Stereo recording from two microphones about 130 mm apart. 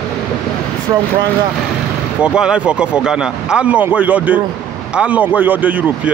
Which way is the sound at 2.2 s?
5° right (ahead or behind).